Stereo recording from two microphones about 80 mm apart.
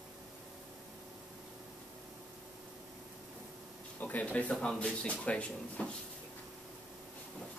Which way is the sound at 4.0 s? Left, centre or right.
Centre.